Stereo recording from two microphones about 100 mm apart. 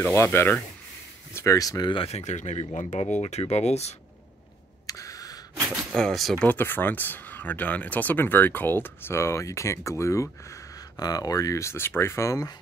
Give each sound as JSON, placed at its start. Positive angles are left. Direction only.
{"t": 0.0, "sound": "speech", "side_deg": 25}
{"t": 1.9, "sound": "speech", "side_deg": 75}
{"t": 4.8, "sound": "a sound", "side_deg": 35}
{"t": 5.9, "sound": "speech", "side_deg": 5}
{"t": 6.4, "sound": "speech", "side_deg": 20}
{"t": 11.0, "sound": "speech", "side_deg": 40}